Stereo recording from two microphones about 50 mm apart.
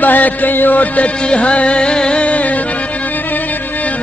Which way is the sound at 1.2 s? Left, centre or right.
Left.